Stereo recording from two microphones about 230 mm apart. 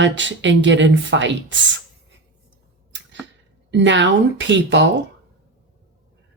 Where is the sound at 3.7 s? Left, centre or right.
Right.